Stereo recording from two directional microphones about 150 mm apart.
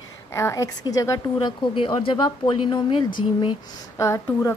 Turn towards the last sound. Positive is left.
turn(degrees=20)  # may be behind; listen again after turning